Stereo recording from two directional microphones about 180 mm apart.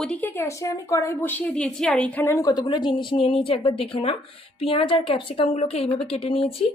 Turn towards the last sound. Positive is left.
turn(degrees=30)  # may be behind; listen again after turning